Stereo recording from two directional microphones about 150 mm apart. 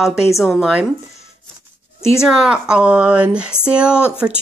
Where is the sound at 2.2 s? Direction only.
5° right (ahead or behind).